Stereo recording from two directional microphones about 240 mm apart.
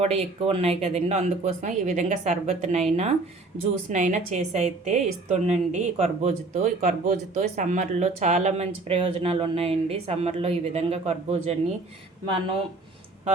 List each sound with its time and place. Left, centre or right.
0.0 s a woman's voice: right